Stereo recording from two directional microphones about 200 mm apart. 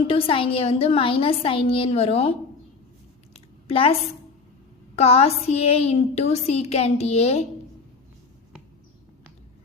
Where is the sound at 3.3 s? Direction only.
30° left (ahead or behind).